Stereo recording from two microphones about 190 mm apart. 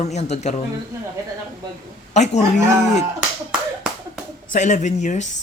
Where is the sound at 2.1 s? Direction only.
35° left (ahead or behind).